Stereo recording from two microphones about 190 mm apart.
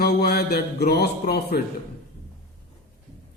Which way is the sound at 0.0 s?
55° left (ahead or behind).